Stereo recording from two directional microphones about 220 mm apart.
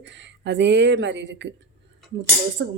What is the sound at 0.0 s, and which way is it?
Speech, 55° right (ahead or behind).